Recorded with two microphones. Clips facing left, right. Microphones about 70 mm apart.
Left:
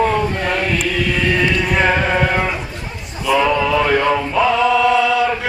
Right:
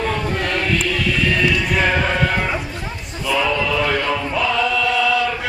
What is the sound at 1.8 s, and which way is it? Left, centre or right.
Chant, centre.